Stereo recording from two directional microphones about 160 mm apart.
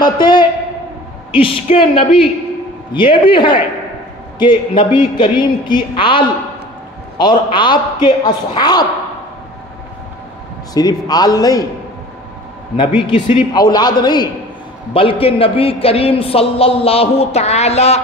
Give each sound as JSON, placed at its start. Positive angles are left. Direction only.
{"t": 0.0, "sound": "a man's voice", "side_deg": 25}
{"t": 7.5, "sound": "a man's voice", "side_deg": 30}
{"t": 10.7, "sound": "a man's voice", "side_deg": 25}
{"t": 12.7, "sound": "a man's voice", "side_deg": 30}